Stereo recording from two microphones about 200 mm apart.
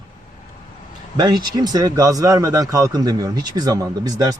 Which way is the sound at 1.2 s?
20° right (ahead or behind).